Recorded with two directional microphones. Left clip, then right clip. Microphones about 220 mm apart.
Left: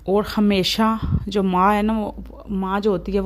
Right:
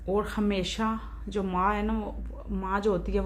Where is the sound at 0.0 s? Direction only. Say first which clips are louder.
Left 8 dB; 45° left (ahead or behind).